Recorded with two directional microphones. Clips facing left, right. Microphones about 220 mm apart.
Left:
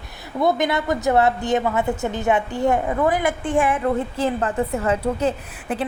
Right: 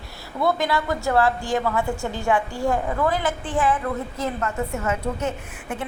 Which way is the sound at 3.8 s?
25° left (ahead or behind).